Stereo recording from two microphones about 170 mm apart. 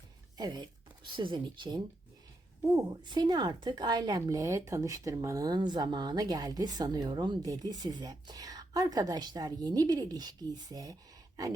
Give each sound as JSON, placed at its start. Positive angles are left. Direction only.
{"t": 0.3, "sound": "a woman's voice", "side_deg": -25}